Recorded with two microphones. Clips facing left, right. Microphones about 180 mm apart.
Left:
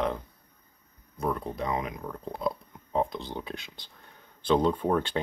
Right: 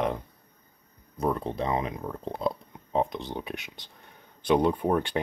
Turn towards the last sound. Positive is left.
turn(degrees=-15)  # may be behind; listen again after turning